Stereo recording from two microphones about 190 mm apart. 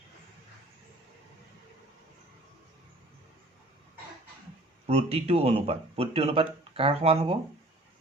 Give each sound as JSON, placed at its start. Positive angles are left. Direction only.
{"t": 4.9, "sound": "speech", "side_deg": -35}